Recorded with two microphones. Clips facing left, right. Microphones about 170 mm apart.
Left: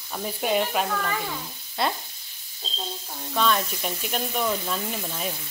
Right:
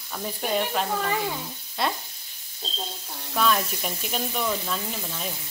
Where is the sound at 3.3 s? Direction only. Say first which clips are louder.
Even; 5° right (ahead or behind).